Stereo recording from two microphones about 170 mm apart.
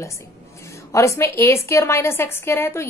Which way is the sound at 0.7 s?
15° left (ahead or behind).